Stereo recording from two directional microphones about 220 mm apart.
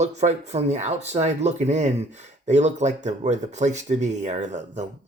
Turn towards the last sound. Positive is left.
turn(degrees=-30)  # may be behind; listen again after turning